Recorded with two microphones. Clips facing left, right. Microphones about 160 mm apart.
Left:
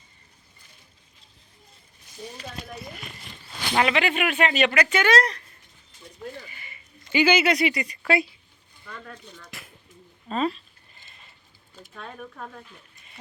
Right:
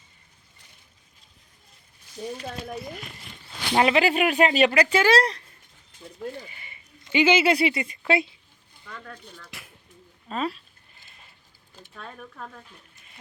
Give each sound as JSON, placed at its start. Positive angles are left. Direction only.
{"t": 3.8, "sound": "speech", "side_deg": -35}
{"t": 6.5, "sound": "speech", "side_deg": -25}
{"t": 10.2, "sound": "speech", "side_deg": -5}